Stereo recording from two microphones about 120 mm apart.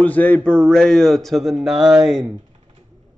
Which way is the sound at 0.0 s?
15° left (ahead or behind).